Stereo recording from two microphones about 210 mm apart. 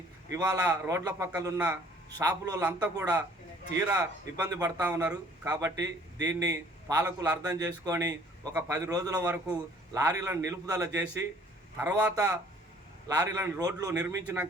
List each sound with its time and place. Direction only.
0.3 s a man's voice: 15° right (ahead or behind)